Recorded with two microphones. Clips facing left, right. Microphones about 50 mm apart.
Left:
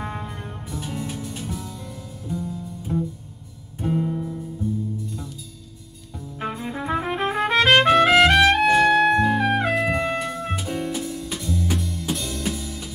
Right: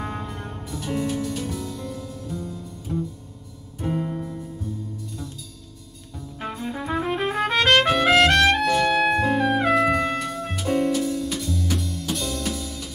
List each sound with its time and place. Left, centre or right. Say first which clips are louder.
0.0 s music: even; centre
0.7 s music: right 5 dB; centre
3.8 s music: left 2 dB; centre
6.4 s trumpet: left 2 dB; centre
8.9 s music: left 2 dB; centre
10.6 s music: right 6 dB; centre
10.9 s music: right 5 dB; centre